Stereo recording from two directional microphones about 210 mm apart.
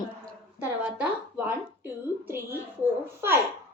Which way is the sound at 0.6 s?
10° right (ahead or behind).